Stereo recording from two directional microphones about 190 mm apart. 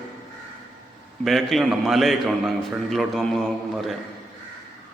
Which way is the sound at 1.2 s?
Centre (ahead or behind).